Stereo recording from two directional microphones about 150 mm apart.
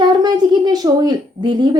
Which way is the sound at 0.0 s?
30° right (ahead or behind).